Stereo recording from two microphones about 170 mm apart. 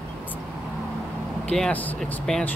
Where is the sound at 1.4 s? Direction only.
5° left (ahead or behind).